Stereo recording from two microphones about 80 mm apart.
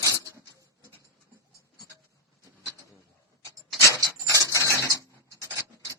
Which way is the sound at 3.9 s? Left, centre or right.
Right.